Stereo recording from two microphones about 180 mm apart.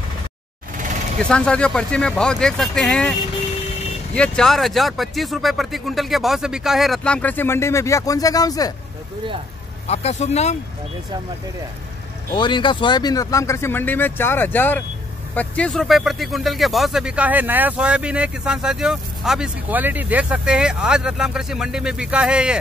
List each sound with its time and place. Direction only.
1.2 s speech: 5° left (ahead or behind)
9.8 s speech: 40° left (ahead or behind)
12.3 s speech: 25° left (ahead or behind); by 22.6 s 5° right (ahead or behind)